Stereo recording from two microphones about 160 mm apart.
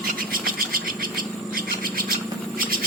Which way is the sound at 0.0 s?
65° right (ahead or behind).